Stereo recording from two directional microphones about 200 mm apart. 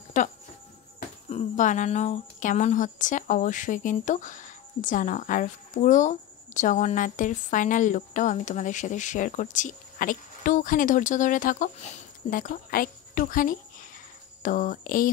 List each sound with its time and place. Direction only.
0.2 s speech: 40° left (ahead or behind)